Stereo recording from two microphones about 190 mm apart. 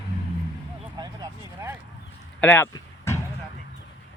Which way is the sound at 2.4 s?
10° left (ahead or behind).